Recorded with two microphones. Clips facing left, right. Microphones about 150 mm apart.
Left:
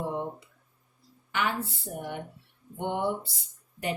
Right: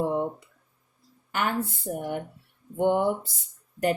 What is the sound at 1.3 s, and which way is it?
Speech, 45° right (ahead or behind).